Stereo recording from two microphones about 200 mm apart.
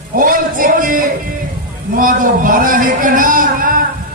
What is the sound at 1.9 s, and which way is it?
A man's voice, 45° right (ahead or behind).